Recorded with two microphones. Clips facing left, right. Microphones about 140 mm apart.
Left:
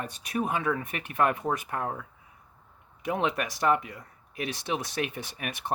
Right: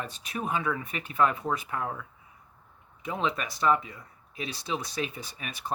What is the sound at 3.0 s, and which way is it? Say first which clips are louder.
Speech: left 2 dB; 65° left (ahead or behind).